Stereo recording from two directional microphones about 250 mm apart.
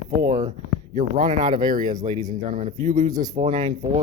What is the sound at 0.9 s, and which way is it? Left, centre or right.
Speech, right.